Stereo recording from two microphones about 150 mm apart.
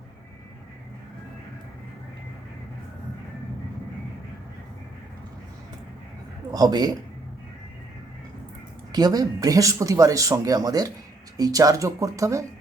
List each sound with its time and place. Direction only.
6.5 s speech: 25° right (ahead or behind)
8.9 s speech: 25° right (ahead or behind)